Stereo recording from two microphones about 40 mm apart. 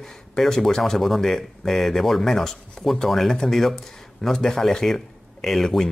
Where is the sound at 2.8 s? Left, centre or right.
Centre.